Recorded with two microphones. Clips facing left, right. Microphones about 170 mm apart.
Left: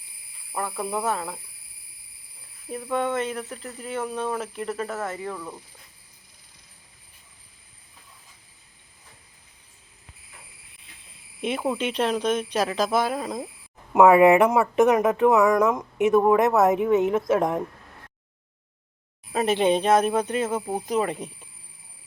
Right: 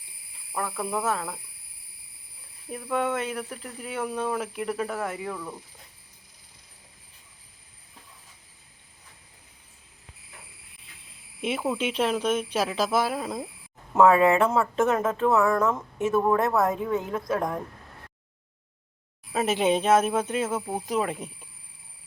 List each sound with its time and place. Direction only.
0.5 s speech: centre (ahead or behind)
2.9 s speech: 10° right (ahead or behind)
5.4 s speech: 5° left (ahead or behind)
11.3 s speech: 5° right (ahead or behind)
13.9 s speech: 15° left (ahead or behind)
19.3 s speech: 5° right (ahead or behind)